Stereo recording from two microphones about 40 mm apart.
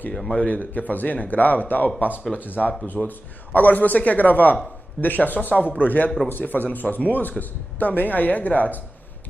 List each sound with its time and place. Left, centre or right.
0.1 s speech: centre
0.4 s speech: left